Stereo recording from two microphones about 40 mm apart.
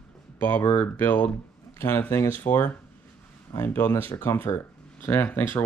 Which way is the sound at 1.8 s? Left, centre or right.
Left.